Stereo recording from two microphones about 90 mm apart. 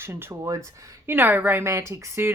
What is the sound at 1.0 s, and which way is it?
A woman's voice, 25° right (ahead or behind).